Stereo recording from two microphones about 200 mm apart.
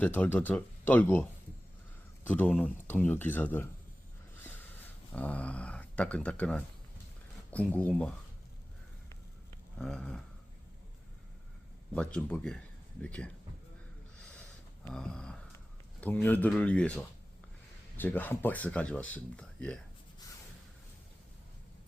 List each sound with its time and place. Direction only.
0.0 s speech: 10° left (ahead or behind)
5.1 s speech: 5° left (ahead or behind)
9.7 s a sound: 5° left (ahead or behind)
11.9 s speech: 5° left (ahead or behind)
14.8 s speech: 5° left (ahead or behind)